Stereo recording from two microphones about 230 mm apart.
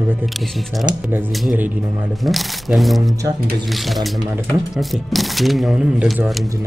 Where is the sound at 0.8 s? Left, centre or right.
Centre.